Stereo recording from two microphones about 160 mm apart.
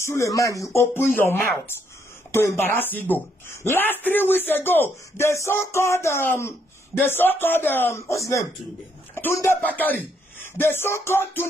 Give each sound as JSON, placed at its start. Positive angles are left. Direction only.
{"t": 0.0, "sound": "speech", "side_deg": 20}